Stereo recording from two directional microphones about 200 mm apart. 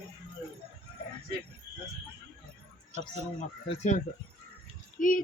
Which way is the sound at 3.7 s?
35° left (ahead or behind).